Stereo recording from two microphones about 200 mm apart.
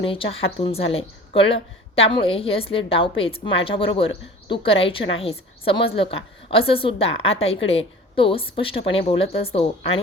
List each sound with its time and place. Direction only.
0.0 s a woman's voice: 25° left (ahead or behind)